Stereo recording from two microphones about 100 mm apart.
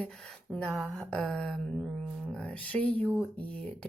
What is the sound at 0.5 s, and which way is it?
Speech, 10° left (ahead or behind).